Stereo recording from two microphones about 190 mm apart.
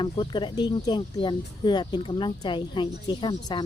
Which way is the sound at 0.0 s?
25° left (ahead or behind).